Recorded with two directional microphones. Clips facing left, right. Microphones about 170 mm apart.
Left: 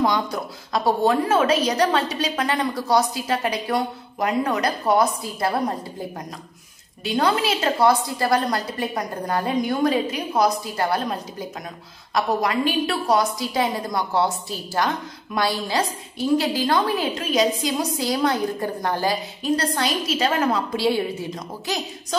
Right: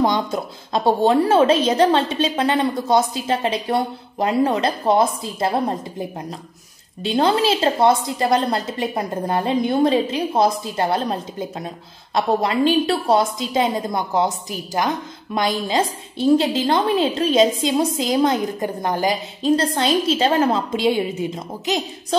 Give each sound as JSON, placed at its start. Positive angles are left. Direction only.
{"t": 0.0, "sound": "a woman's voice", "side_deg": -25}